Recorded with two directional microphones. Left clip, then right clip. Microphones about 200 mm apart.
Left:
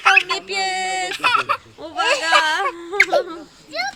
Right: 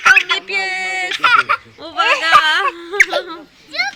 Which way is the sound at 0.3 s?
35° left (ahead or behind).